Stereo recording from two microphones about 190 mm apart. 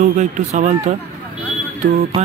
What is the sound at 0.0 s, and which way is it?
Speech, 40° right (ahead or behind).